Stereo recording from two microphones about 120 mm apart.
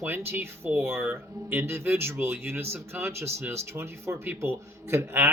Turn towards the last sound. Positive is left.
turn(degrees=-20)  # may be behind; listen again after turning